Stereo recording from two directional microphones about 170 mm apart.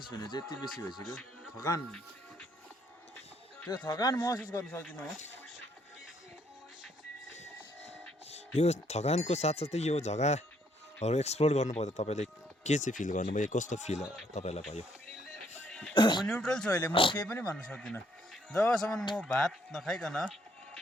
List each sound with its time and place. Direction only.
0.1 s speech: 25° left (ahead or behind)
1.0 s speech: centre (ahead or behind)
3.8 s speech: 20° left (ahead or behind)
8.3 s speech: 40° left (ahead or behind)
14.0 s speech: centre (ahead or behind)
14.3 s speech: 40° left (ahead or behind)
15.7 s music: 5° left (ahead or behind)
16.0 s speech: 25° left (ahead or behind)
16.2 s speech: 5° left (ahead or behind)
16.9 s speech: 30° left (ahead or behind)
17.2 s speech: 10° left (ahead or behind)